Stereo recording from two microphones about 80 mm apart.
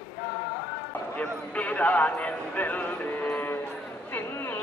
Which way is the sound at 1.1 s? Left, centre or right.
Centre.